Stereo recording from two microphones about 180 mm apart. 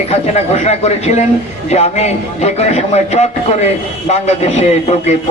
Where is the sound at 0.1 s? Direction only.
35° left (ahead or behind).